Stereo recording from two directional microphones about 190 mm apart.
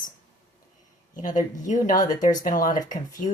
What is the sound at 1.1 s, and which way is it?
Speech, 45° left (ahead or behind).